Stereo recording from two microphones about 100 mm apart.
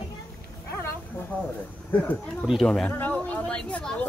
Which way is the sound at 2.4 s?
5° right (ahead or behind).